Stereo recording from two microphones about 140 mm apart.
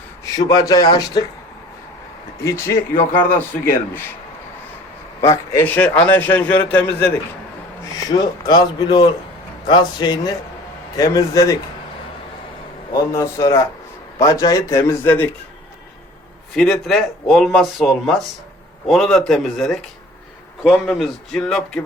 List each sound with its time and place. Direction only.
0.3 s a man's voice: 25° left (ahead or behind)
2.4 s a man's voice: 20° left (ahead or behind)
5.2 s a man's voice: 20° left (ahead or behind)
8.1 s a man's voice: 30° left (ahead or behind)
12.9 s a man's voice: 25° left (ahead or behind)
16.6 s speech: centre (ahead or behind)
20.9 s speech: 5° left (ahead or behind)